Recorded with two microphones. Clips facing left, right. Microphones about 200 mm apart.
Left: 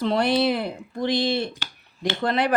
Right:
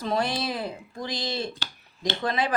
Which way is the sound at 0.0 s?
65° left (ahead or behind).